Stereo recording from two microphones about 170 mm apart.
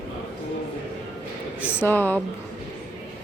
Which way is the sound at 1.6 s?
10° left (ahead or behind).